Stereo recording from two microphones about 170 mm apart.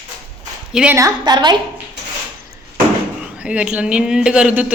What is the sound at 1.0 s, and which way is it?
Speech, 25° right (ahead or behind).